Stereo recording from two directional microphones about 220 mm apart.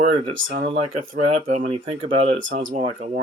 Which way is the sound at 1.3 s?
30° right (ahead or behind).